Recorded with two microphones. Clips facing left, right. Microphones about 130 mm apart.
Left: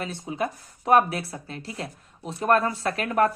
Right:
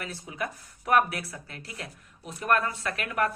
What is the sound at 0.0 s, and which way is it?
Speech, 25° left (ahead or behind).